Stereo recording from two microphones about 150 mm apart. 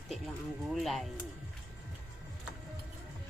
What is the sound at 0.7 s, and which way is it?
Speech, centre (ahead or behind).